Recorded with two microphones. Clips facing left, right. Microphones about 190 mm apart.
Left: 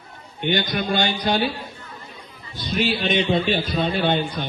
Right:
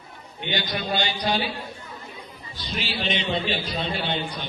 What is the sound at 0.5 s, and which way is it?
Speech, 50° left (ahead or behind).